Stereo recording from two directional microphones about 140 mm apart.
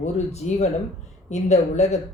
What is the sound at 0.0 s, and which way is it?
Speech, 50° left (ahead or behind).